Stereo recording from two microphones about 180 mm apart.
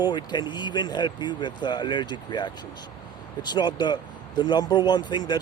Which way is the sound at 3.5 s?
25° left (ahead or behind).